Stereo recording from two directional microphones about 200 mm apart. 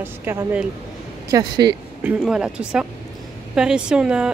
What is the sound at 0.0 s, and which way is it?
Speech, 10° right (ahead or behind).